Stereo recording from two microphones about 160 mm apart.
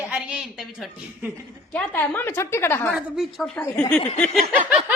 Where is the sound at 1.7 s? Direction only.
10° left (ahead or behind).